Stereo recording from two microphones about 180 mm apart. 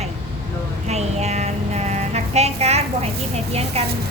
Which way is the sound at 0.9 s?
40° right (ahead or behind).